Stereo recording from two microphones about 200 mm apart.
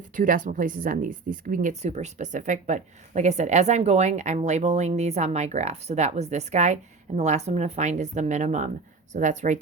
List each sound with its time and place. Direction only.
0.2 s speech: 40° right (ahead or behind)